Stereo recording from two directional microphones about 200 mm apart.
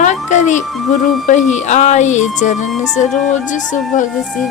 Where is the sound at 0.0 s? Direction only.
35° left (ahead or behind).